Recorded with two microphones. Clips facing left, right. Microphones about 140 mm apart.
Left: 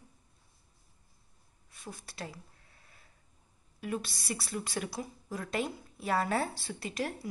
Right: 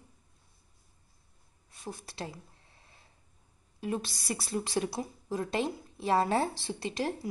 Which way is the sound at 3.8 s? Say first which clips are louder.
Right 2 dB; 30° right (ahead or behind).